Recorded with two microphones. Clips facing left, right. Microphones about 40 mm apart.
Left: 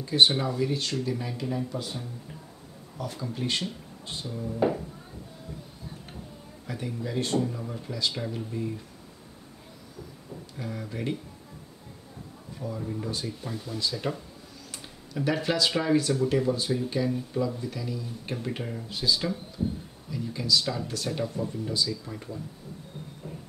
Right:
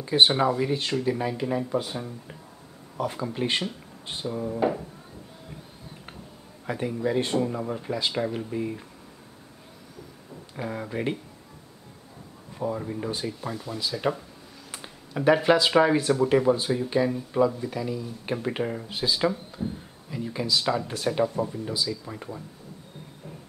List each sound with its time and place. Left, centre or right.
0.0 s speech: right
4.6 s speech: centre
6.7 s speech: right
10.5 s speech: right
12.5 s speech: right
12.8 s speech: right
14.7 s a sound: right
15.8 s speech: right